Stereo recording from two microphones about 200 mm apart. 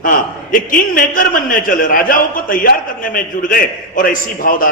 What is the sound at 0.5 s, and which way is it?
A man's voice, 45° left (ahead or behind).